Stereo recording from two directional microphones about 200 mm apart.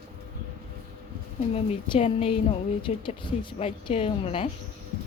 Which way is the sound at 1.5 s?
30° left (ahead or behind).